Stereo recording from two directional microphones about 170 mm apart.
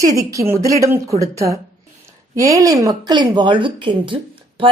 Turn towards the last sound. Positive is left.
turn(degrees=-30)  # may be behind; listen again after turning